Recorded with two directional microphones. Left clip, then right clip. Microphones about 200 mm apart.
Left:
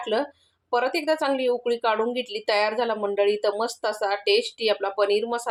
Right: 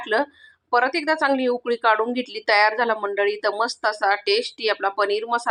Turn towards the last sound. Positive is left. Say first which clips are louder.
# right 1 dB
turn(degrees=-20)  # may be behind; listen again after turning